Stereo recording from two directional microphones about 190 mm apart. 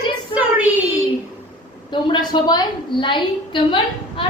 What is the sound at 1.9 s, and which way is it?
A woman's voice, 25° left (ahead or behind).